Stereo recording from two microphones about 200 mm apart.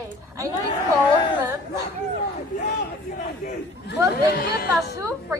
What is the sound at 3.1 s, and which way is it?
Speech, 40° left (ahead or behind).